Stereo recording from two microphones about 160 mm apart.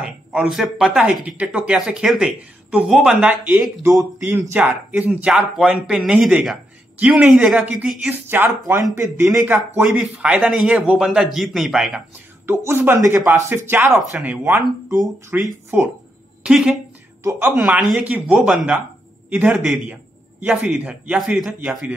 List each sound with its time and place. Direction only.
0.0 s speech: 5° right (ahead or behind)
3.8 s a woman's voice: 20° right (ahead or behind)
17.2 s speech: 20° right (ahead or behind)